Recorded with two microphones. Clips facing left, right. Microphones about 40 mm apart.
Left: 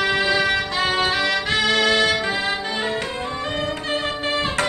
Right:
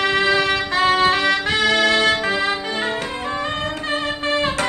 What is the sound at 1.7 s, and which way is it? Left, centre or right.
Music, centre.